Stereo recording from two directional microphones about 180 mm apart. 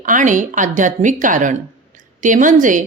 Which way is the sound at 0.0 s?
45° right (ahead or behind).